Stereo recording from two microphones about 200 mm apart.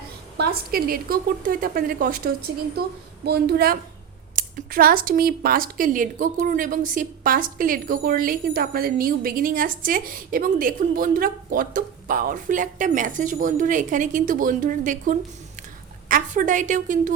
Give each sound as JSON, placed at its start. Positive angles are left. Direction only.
{"t": 0.3, "sound": "a woman's voice", "side_deg": -50}